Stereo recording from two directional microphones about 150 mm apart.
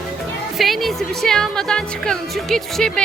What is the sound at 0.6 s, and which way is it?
Speech, centre (ahead or behind).